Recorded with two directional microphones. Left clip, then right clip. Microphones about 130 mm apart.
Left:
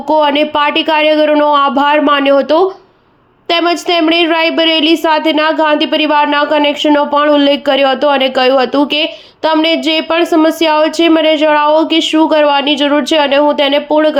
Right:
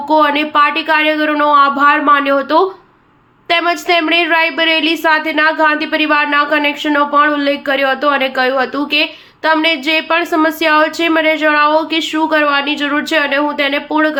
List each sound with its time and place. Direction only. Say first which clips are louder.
0.1 s a woman's voice: left 2 dB; 50° left (ahead or behind)